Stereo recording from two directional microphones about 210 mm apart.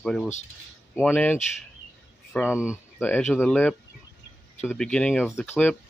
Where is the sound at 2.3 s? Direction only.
5° right (ahead or behind).